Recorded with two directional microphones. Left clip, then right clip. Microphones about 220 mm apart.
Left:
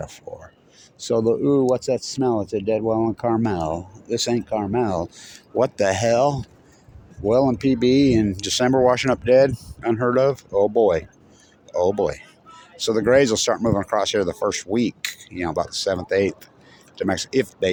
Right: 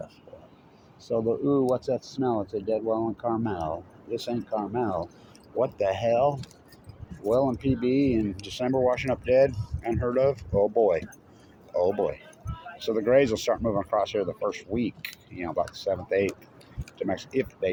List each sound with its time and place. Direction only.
0.3 s whispering: 55° left (ahead or behind)
0.9 s speech: 60° left (ahead or behind)